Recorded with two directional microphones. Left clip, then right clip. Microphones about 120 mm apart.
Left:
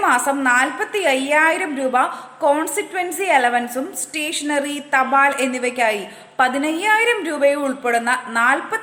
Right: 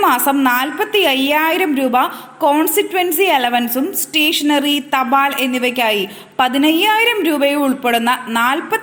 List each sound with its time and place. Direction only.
0.0 s a woman's voice: 20° right (ahead or behind)